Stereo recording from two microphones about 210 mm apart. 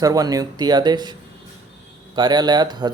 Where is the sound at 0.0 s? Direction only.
15° right (ahead or behind).